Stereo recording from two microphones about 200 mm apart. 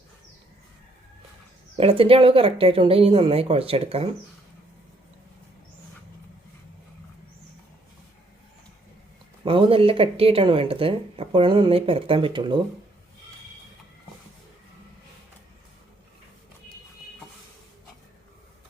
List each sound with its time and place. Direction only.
1.8 s speech: 30° right (ahead or behind)
9.4 s speech: 25° right (ahead or behind)